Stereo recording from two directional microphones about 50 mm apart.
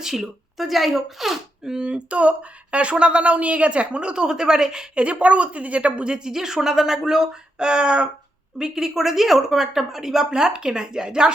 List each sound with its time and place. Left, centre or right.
0.0 s a woman's voice: centre
5.0 s a woman's voice: right